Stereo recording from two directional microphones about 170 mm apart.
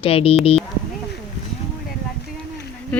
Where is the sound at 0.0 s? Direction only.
35° left (ahead or behind).